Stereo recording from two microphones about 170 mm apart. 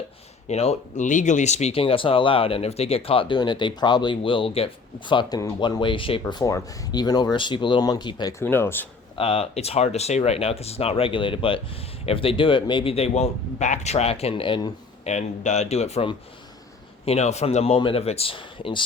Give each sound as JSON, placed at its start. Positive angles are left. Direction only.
{"t": 0.4, "sound": "speech", "side_deg": 35}
{"t": 9.1, "sound": "speech", "side_deg": 35}
{"t": 15.0, "sound": "speech", "side_deg": 40}